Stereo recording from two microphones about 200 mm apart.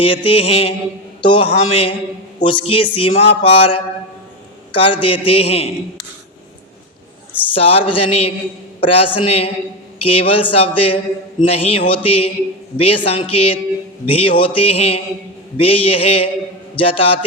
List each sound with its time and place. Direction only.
0.0 s speech: 25° left (ahead or behind)
4.7 s speech: 25° left (ahead or behind)
7.5 s a man's voice: 30° left (ahead or behind)